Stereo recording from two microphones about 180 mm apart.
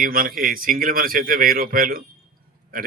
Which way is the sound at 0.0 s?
55° right (ahead or behind).